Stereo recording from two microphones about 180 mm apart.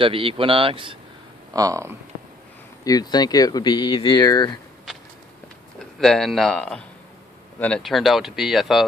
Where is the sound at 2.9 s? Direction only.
20° left (ahead or behind).